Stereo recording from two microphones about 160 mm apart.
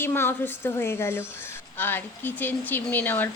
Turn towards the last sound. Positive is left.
turn(degrees=10)  # may be behind; listen again after turning